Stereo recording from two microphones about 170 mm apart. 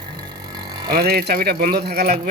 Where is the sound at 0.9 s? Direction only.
65° right (ahead or behind).